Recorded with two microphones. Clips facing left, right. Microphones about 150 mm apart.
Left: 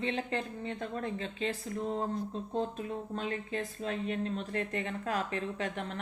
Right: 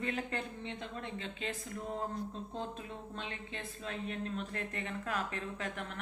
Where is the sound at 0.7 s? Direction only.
45° left (ahead or behind).